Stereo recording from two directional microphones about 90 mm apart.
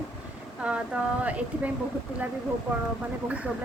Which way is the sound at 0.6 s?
10° right (ahead or behind).